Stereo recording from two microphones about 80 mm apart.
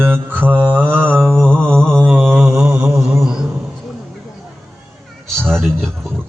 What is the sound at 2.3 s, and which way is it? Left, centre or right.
Mantra, right.